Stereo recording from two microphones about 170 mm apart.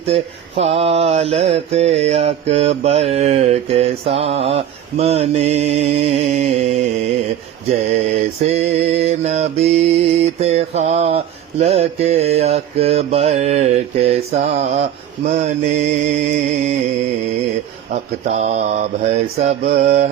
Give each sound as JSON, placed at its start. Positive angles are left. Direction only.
{"t": 0.0, "sound": "mantra", "side_deg": -35}
{"t": 7.9, "sound": "mantra", "side_deg": -40}
{"t": 18.3, "sound": "mantra", "side_deg": -40}